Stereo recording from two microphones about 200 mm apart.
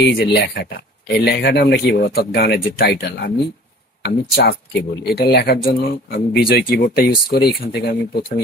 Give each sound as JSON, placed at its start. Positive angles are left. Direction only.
{"t": 0.0, "sound": "speech", "side_deg": 60}